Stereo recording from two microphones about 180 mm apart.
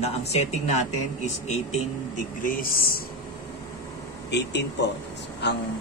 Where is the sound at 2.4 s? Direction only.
50° left (ahead or behind).